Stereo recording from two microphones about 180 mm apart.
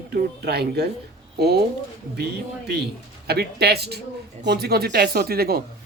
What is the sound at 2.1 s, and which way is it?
Speech, 65° right (ahead or behind).